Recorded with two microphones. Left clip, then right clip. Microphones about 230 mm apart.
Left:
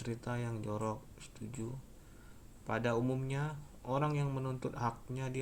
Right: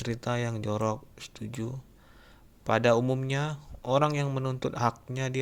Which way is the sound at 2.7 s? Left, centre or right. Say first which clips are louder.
Right 11 dB; right.